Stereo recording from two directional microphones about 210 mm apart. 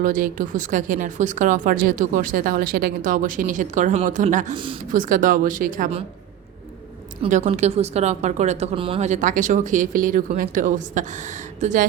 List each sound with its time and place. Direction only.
0.0 s speech: 40° right (ahead or behind)
7.2 s speech: 30° right (ahead or behind)